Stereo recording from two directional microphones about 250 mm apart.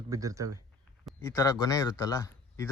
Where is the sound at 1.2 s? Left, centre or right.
Centre.